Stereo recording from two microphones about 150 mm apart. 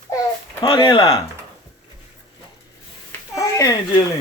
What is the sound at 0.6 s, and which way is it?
Speech, 30° left (ahead or behind).